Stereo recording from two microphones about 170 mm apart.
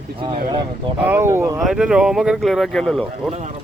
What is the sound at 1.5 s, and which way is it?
Speech, centre (ahead or behind).